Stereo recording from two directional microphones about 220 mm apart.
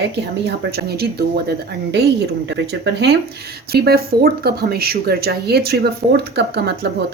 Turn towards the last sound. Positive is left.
turn(degrees=-50)  # may be behind; listen again after turning